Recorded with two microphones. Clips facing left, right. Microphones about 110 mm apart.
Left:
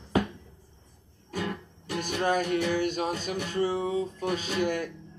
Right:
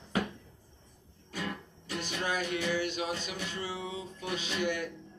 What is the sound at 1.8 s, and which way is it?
Music, 50° left (ahead or behind).